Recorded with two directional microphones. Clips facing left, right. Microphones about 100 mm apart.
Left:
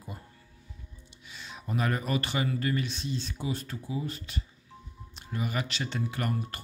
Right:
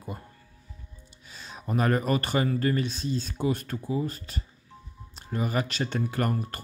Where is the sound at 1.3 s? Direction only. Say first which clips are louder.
Right 4 dB; 40° right (ahead or behind).